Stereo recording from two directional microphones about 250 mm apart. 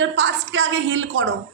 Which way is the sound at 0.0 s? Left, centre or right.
Right.